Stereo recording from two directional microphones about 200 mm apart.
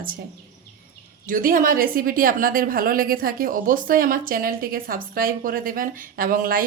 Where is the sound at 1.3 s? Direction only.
40° right (ahead or behind).